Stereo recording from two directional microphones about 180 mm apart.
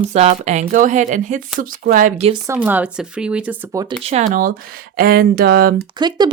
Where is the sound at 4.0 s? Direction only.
35° right (ahead or behind); by 5.8 s 55° right (ahead or behind).